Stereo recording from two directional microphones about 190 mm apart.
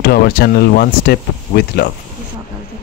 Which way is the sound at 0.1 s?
55° left (ahead or behind).